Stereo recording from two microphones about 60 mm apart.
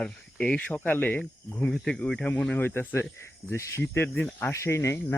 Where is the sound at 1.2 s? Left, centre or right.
Centre.